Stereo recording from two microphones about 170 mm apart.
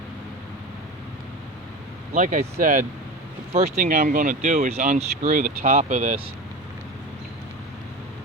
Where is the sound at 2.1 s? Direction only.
50° right (ahead or behind).